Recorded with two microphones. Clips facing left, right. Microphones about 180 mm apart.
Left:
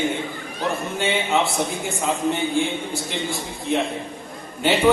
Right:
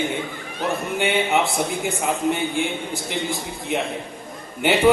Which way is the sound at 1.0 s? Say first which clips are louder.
Right 1 dB; 15° right (ahead or behind).